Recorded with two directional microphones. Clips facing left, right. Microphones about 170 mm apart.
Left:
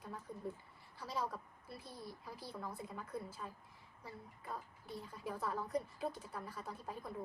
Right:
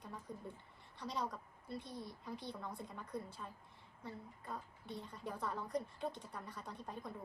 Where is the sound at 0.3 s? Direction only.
5° left (ahead or behind).